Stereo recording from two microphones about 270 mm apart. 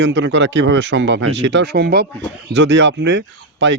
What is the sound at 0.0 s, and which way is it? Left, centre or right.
A man's voice, right.